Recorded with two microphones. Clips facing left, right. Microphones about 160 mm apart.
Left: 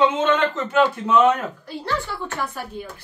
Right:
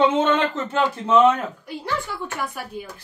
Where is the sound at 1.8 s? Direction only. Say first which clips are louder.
Left 1 dB; 10° right (ahead or behind).